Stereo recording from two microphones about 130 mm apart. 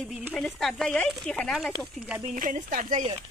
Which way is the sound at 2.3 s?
90° right.